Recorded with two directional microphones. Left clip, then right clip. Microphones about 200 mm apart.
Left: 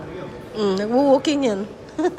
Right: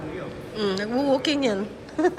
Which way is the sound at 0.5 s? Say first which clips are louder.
Left 6 dB; 20° left (ahead or behind).